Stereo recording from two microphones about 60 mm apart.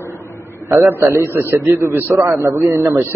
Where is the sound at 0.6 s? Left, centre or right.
Right.